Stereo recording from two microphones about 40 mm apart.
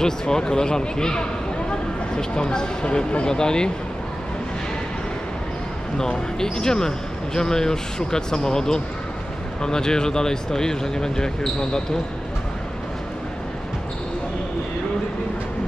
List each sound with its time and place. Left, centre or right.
0.0 s speech: centre
6.4 s speech: centre